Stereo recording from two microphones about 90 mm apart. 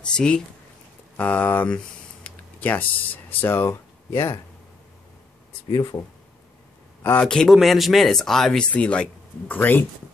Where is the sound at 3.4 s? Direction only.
25° left (ahead or behind).